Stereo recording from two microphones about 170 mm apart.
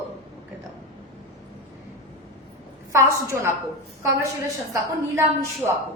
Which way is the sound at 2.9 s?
15° right (ahead or behind).